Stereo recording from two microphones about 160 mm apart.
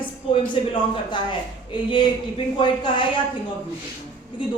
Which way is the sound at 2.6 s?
30° left (ahead or behind).